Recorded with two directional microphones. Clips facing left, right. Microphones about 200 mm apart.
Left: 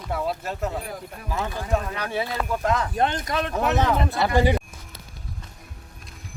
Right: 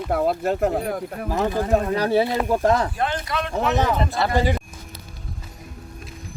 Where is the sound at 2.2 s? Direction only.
20° right (ahead or behind).